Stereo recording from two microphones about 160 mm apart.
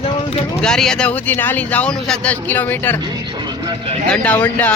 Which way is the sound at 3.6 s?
30° right (ahead or behind).